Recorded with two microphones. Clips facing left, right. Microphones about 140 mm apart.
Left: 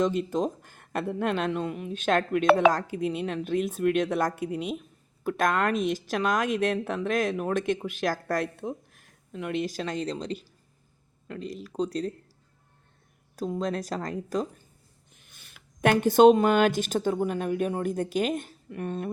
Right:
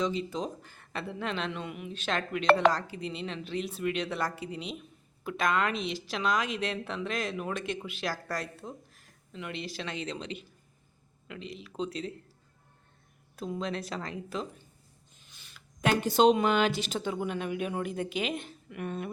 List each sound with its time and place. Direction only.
0.0 s speech: 50° left (ahead or behind)
13.3 s speech: 40° left (ahead or behind)
15.1 s speech: 55° left (ahead or behind); by 19.1 s 35° left (ahead or behind)